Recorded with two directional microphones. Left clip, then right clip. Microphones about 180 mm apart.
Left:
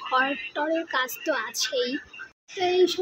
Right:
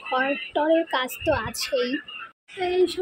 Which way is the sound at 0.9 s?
10° right (ahead or behind).